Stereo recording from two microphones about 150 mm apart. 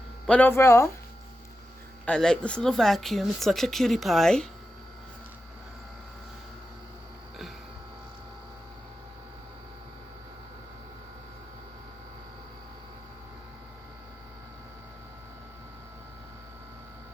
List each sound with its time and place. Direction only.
0.3 s speech: 10° left (ahead or behind)
2.0 s speech: 5° left (ahead or behind)